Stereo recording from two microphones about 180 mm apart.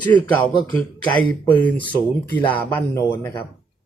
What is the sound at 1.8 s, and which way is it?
Speech, 10° left (ahead or behind).